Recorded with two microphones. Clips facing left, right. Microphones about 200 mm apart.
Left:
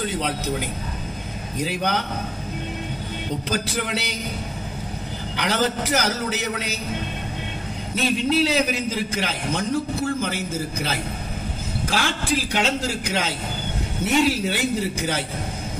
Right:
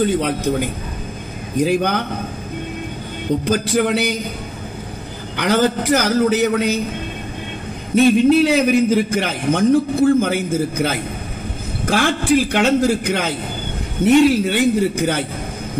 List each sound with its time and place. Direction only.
0.0 s a man's voice: 55° right (ahead or behind)
3.4 s a man's voice: 55° right (ahead or behind)
5.4 s a man's voice: 55° right (ahead or behind)
7.9 s a man's voice: 55° right (ahead or behind)